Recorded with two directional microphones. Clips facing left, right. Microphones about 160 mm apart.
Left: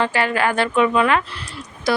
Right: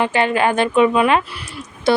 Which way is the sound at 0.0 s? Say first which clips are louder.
Right 3 dB; 20° right (ahead or behind).